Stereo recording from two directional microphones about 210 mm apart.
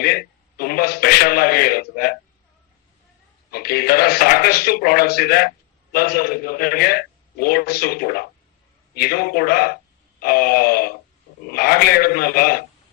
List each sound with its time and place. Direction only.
0.0 s a man's voice: 45° left (ahead or behind)
3.5 s a man's voice: 45° left (ahead or behind)